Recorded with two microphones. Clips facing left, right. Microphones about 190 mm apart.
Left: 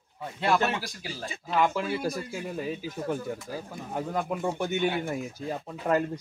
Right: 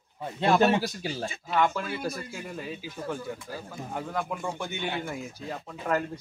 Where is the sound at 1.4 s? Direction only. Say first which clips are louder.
Left 1 dB; 5° left (ahead or behind).